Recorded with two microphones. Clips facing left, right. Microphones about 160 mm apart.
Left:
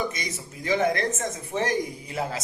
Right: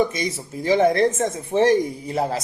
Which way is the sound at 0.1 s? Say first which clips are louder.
Right 8 dB; 30° right (ahead or behind).